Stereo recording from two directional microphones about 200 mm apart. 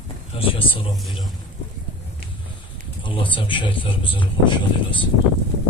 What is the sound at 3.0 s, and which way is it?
A man's voice, 25° left (ahead or behind).